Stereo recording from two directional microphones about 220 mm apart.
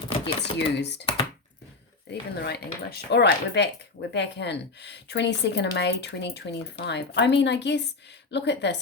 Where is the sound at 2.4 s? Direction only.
45° left (ahead or behind).